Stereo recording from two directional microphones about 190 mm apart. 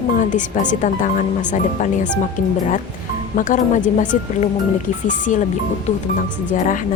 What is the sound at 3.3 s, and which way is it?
Speech, 45° left (ahead or behind).